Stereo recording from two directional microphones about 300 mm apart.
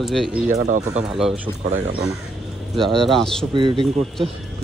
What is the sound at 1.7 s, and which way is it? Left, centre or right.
Speech, right.